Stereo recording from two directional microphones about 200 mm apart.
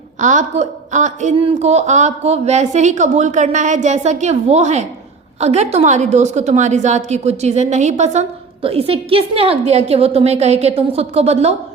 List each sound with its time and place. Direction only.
0.2 s a woman's voice: 40° right (ahead or behind)